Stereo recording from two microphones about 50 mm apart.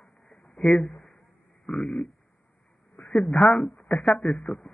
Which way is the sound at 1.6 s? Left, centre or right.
Centre.